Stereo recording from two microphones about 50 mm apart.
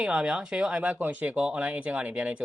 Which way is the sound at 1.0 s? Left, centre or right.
Right.